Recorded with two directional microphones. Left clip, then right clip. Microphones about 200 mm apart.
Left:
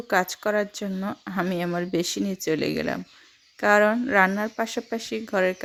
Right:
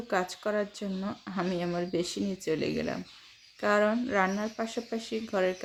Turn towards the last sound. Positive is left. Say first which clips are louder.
# left 5 dB
turn(degrees=40)  # may be behind; listen again after turning